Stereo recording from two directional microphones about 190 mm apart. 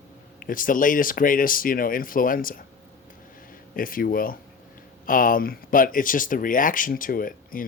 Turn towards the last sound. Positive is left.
turn(degrees=45)  # may be behind; listen again after turning